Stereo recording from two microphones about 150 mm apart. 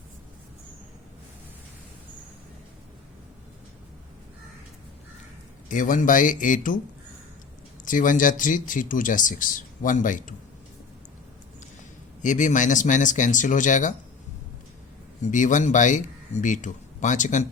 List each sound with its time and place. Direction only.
5.6 s speech: 60° left (ahead or behind)
7.9 s speech: 60° left (ahead or behind)
12.2 s speech: 55° left (ahead or behind)
15.2 s speech: 55° left (ahead or behind)